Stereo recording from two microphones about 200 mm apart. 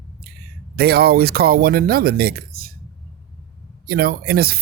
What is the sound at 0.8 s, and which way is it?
A man's voice, 50° right (ahead or behind).